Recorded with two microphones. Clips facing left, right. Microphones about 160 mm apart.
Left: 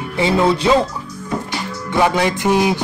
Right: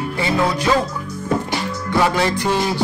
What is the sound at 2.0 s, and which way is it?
Speech, 15° left (ahead or behind).